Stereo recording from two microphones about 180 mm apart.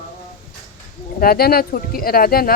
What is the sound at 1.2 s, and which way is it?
Speech, 55° left (ahead or behind).